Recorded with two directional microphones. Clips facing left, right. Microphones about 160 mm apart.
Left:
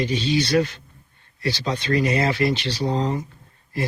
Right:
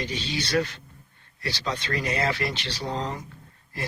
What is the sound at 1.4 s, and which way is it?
Speech, 15° left (ahead or behind).